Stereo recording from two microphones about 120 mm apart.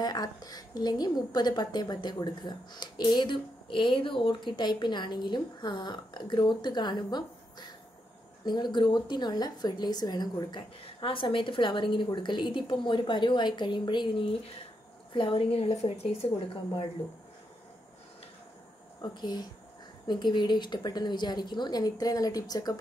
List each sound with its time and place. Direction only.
0.0 s a woman's voice: 35° left (ahead or behind); by 16.8 s 55° left (ahead or behind)
18.9 s a woman's voice: 35° left (ahead or behind)